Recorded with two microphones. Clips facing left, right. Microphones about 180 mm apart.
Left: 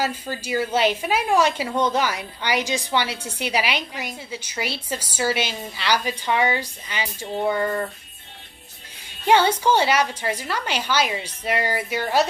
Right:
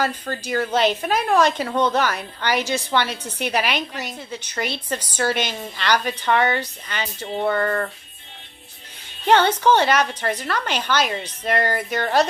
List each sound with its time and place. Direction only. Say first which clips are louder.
0.0 s a woman's voice: right 2 dB; 10° left (ahead or behind)
9.2 s a woman's voice: right 1 dB; 10° left (ahead or behind)